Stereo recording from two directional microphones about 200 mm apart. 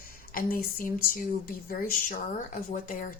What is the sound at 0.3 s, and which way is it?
A woman's voice, 45° left (ahead or behind).